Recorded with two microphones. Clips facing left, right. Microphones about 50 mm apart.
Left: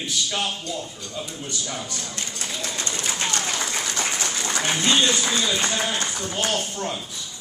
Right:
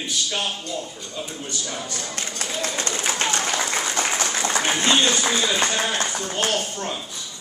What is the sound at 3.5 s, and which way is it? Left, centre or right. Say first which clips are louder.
Applause: right 3 dB; right.